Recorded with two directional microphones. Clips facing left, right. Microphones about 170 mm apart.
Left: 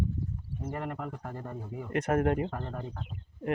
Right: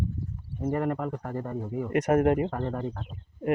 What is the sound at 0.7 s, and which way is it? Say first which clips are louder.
Speech: right 9 dB; 50° right (ahead or behind).